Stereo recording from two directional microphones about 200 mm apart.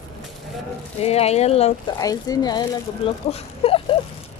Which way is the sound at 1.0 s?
30° left (ahead or behind).